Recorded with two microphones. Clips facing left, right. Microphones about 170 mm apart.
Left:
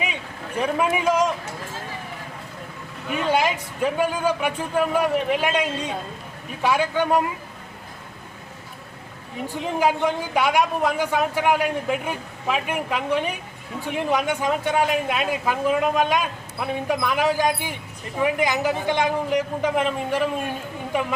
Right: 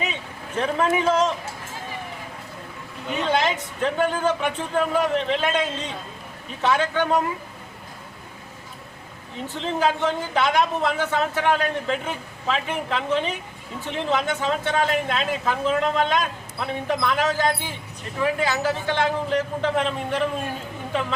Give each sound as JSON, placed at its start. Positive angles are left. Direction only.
{"t": 0.0, "sound": "speech", "side_deg": 10}
{"t": 3.2, "sound": "a man's voice", "side_deg": 10}
{"t": 9.5, "sound": "a man's voice", "side_deg": 10}